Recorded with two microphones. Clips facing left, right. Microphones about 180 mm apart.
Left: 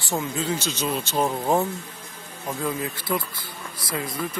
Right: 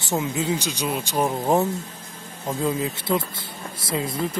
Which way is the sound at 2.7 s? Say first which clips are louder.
Right 3 dB; 25° right (ahead or behind).